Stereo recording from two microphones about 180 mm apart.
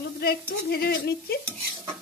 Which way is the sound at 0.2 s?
60° left (ahead or behind).